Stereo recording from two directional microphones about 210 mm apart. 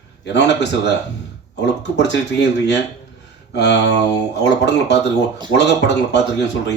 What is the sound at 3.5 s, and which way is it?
Speech, 55° left (ahead or behind).